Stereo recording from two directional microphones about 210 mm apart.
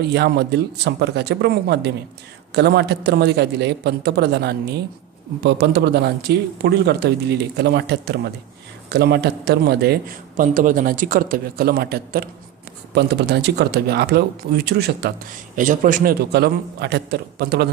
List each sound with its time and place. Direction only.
0.1 s speech: 55° right (ahead or behind)